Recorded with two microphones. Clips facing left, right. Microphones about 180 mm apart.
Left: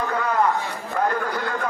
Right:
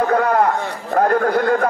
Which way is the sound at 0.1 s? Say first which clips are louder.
Right 8 dB; 60° right (ahead or behind).